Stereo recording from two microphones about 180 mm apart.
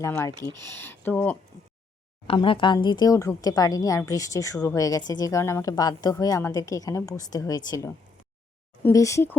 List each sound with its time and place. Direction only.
0.0 s speech: 15° left (ahead or behind)
2.2 s speech: 30° left (ahead or behind)